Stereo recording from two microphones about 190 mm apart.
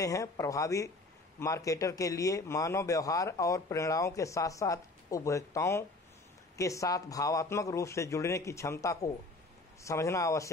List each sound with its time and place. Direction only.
0.0 s a man's voice: 15° left (ahead or behind)